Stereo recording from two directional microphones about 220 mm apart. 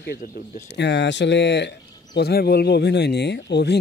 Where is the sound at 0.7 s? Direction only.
50° left (ahead or behind).